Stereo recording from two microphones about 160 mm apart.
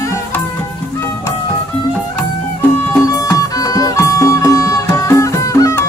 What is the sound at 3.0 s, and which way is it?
Music, 20° left (ahead or behind).